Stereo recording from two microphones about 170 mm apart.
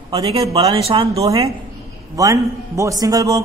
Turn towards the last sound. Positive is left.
turn(degrees=-20)  # may be behind; listen again after turning